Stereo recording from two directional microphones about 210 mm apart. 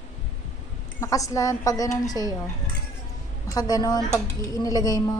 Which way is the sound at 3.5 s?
20° left (ahead or behind).